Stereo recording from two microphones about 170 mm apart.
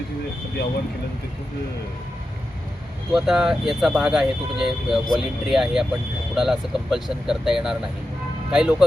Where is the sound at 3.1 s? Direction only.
Centre (ahead or behind).